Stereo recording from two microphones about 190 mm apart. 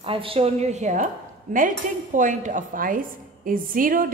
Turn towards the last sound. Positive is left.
turn(degrees=-45)  # may be behind; listen again after turning